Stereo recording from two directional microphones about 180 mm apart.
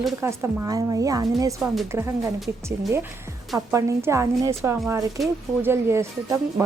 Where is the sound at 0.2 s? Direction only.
15° right (ahead or behind).